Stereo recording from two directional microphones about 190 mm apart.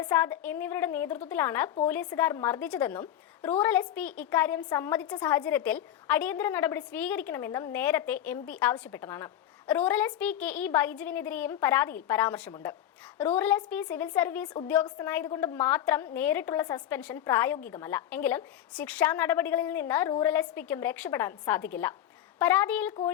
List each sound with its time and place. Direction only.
0.0 s a woman's voice: 15° left (ahead or behind)
14.4 s a woman's voice: 25° left (ahead or behind)